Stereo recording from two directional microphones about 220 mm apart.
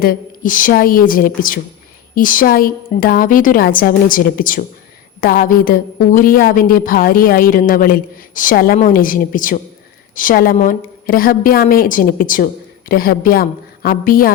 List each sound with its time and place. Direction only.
0.0 s a woman's voice: 40° left (ahead or behind)